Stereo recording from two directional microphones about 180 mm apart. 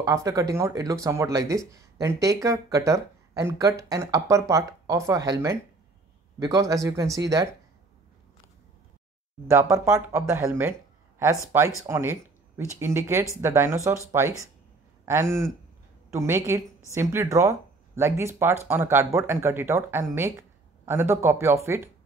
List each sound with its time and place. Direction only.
0.0 s speech: 20° right (ahead or behind)
9.5 s speech: 15° right (ahead or behind)